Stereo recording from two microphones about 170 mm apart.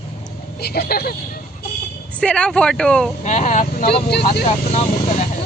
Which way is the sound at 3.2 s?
45° left (ahead or behind).